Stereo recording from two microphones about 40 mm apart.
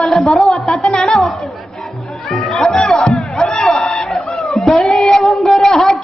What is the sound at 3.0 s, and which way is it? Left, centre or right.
Crowd, left.